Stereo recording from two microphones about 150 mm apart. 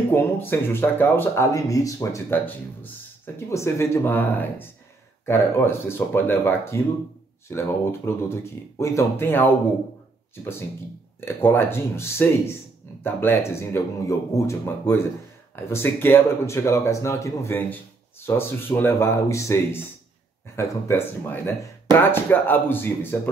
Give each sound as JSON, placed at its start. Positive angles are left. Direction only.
{"t": 0.1, "sound": "speech", "side_deg": 15}
{"t": 11.1, "sound": "speech", "side_deg": 15}